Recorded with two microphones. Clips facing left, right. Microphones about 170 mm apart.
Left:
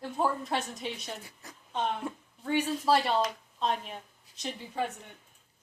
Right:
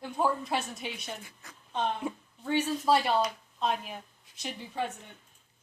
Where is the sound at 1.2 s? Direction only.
35° left (ahead or behind).